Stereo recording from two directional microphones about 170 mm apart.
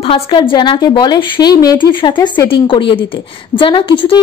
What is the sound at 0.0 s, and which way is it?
A woman's voice, 30° left (ahead or behind).